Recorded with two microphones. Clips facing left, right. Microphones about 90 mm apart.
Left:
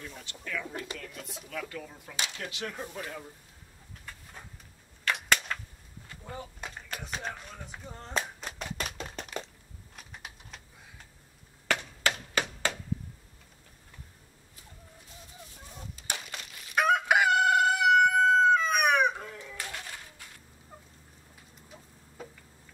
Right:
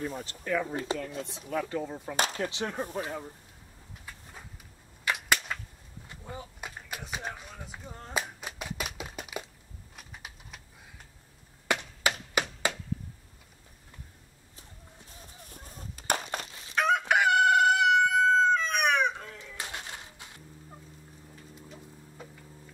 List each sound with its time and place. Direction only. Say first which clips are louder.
0.0 s speech: right 8 dB; 40° right (ahead or behind)
2.1 s speech: right 7 dB; 40° right (ahead or behind)
2.5 s speech: right 5 dB; 25° right (ahead or behind)
4.0 s a sound: even; 5° right (ahead or behind)
5.0 s whip: even; 10° right (ahead or behind)
6.2 s a sound: left 1 dB; 10° right (ahead or behind)
9.9 s typewriter: even; 5° right (ahead or behind)
11.6 s chop: right 1 dB; 15° right (ahead or behind)
12.4 s a sound: right 2 dB; 15° right (ahead or behind)
15.4 s a sound: right 1 dB; 50° right (ahead or behind)
16.7 s chicken: left 1 dB; 10° left (ahead or behind)
19.5 s music: right 1 dB; 20° right (ahead or behind)